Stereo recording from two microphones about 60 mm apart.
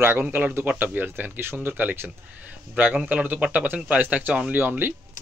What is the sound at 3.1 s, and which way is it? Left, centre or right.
Speech, right.